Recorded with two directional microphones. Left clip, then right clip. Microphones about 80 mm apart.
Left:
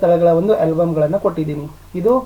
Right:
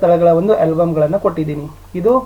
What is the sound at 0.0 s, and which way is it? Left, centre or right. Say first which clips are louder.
Speech: right 2 dB; centre.